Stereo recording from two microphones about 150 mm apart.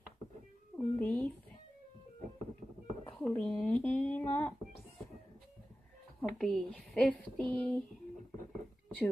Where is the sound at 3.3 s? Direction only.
10° left (ahead or behind).